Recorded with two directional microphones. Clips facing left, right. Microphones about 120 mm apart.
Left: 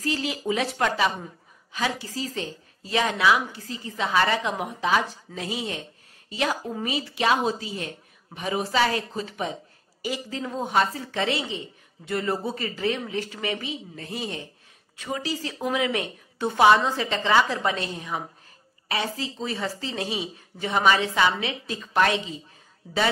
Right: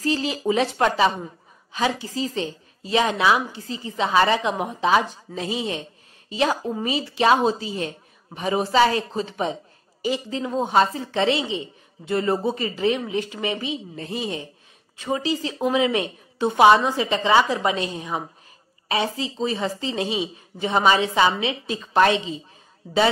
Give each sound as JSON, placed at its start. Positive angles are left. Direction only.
{"t": 0.0, "sound": "a woman's voice", "side_deg": -30}